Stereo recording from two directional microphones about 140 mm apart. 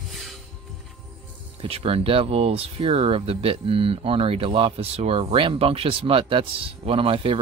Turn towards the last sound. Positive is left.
turn(degrees=-45)  # may be behind; listen again after turning